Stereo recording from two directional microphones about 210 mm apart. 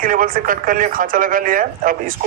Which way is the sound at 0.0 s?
40° right (ahead or behind).